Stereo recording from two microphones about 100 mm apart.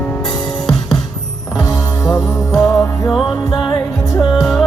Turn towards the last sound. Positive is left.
turn(degrees=5)  # may be behind; listen again after turning